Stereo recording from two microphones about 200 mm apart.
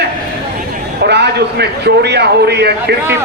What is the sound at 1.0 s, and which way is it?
A man's voice, 55° right (ahead or behind).